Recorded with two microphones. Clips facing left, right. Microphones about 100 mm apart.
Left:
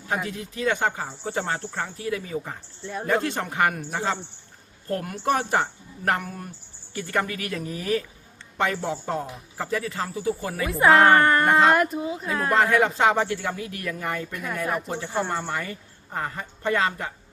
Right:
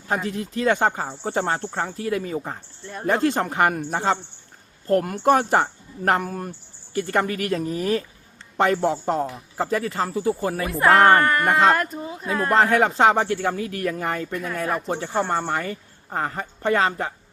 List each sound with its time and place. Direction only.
0.1 s speech: 40° right (ahead or behind)
2.8 s speech: centre (ahead or behind)
3.1 s speech: 35° right (ahead or behind)
5.2 s speech: 40° right (ahead or behind)
9.7 s speech: 40° right (ahead or behind)
10.7 s speech: centre (ahead or behind)
11.2 s speech: 25° left (ahead or behind)
11.7 s speech: 5° left (ahead or behind)
12.5 s speech: 35° right (ahead or behind)
14.9 s speech: 50° right (ahead or behind)